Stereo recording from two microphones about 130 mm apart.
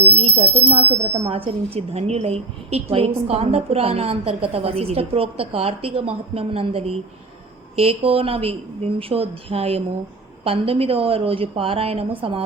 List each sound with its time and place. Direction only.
0.2 s speech: 50° right (ahead or behind)